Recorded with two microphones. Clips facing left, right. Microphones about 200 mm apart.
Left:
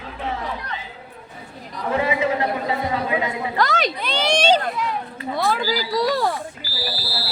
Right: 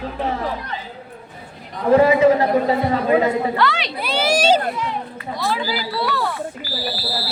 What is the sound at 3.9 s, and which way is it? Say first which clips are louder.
Speech: right 2 dB; 5° right (ahead or behind).